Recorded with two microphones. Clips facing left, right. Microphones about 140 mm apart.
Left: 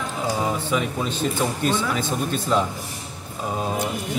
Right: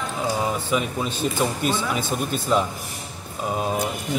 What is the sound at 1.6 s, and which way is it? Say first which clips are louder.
Speech: left 1 dB; 10° right (ahead or behind).